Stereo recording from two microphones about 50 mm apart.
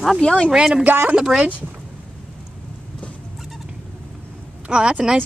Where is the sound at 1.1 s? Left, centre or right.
Centre.